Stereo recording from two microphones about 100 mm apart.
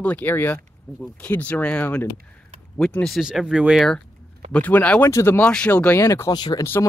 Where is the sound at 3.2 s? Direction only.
5° right (ahead or behind).